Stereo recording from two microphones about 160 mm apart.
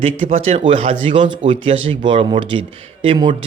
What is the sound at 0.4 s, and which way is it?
Speech, 35° right (ahead or behind).